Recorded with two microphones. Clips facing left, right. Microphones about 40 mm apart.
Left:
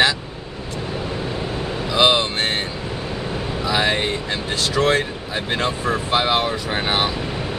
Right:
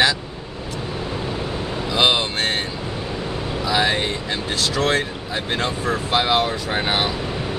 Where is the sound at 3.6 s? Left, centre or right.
Centre.